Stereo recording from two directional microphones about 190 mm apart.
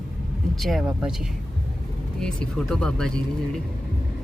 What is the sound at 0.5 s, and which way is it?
Speech, centre (ahead or behind).